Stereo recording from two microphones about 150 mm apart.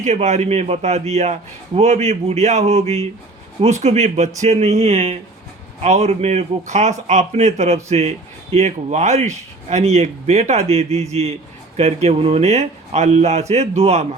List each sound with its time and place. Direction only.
0.0 s a man's voice: 50° right (ahead or behind)